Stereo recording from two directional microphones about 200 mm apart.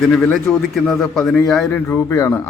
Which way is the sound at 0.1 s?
5° left (ahead or behind).